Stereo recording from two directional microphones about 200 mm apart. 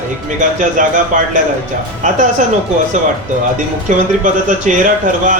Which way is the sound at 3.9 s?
40° right (ahead or behind).